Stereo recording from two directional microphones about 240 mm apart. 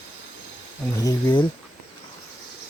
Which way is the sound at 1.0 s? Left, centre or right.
Centre.